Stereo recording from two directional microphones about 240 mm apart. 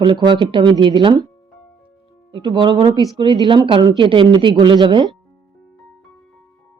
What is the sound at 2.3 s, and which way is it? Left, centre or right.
Speech, centre.